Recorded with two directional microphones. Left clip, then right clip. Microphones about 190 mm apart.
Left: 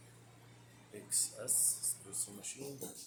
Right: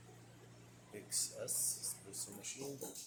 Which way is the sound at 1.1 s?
5° left (ahead or behind).